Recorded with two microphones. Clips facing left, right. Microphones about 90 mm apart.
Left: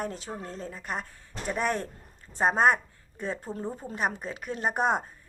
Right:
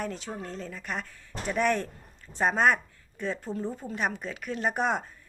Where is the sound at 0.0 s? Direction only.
35° left (ahead or behind).